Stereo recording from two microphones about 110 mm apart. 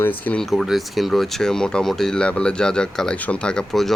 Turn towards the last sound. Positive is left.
turn(degrees=5)  # may be behind; listen again after turning